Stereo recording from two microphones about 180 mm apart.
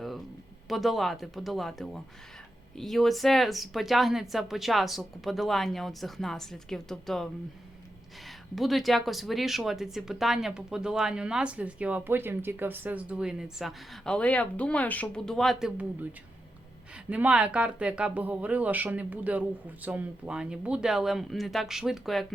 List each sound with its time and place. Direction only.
0.7 s speech: centre (ahead or behind)
8.5 s speech: centre (ahead or behind)
17.1 s speech: 5° right (ahead or behind)